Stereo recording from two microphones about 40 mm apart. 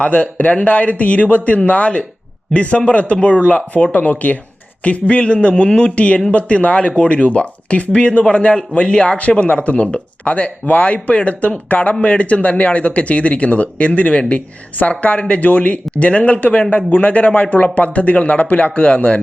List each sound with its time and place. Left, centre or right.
0.0 s a man's voice: left